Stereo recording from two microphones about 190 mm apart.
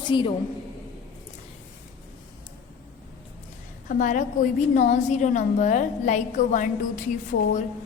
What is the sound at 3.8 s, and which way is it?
A woman's voice, 40° left (ahead or behind).